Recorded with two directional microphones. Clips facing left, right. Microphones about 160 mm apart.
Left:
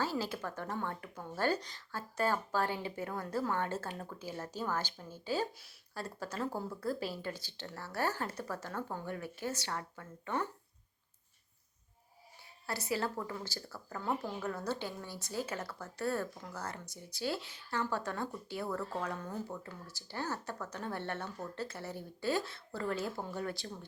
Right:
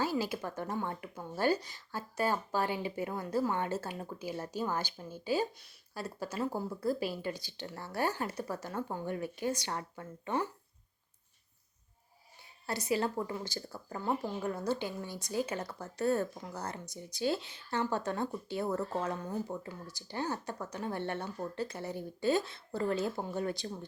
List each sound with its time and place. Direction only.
0.0 s speech: 10° right (ahead or behind)
12.6 s speech: 20° right (ahead or behind)